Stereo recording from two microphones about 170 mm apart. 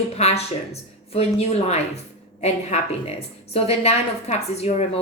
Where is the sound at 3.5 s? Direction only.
35° left (ahead or behind).